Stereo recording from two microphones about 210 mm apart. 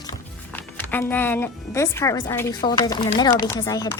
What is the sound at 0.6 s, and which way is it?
A woman's voice, 10° left (ahead or behind).